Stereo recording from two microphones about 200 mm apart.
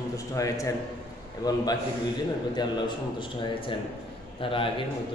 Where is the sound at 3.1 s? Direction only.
25° left (ahead or behind).